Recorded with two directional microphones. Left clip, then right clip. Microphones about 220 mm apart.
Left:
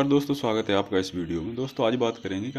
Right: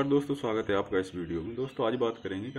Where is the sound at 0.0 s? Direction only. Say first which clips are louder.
Left 4 dB; 40° left (ahead or behind).